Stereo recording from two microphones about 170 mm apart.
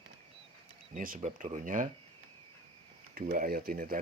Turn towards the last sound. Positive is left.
turn(degrees=-60)  # may be behind; listen again after turning